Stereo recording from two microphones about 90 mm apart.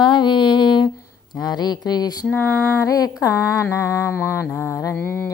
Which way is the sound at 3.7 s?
35° left (ahead or behind).